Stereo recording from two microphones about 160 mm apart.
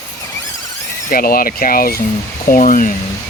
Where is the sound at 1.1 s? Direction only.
65° left (ahead or behind).